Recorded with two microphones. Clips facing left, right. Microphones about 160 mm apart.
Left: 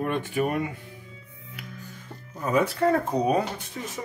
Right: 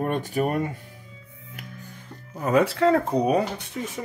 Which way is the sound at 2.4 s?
70° right (ahead or behind).